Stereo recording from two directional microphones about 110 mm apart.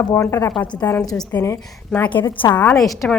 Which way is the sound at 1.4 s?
25° left (ahead or behind).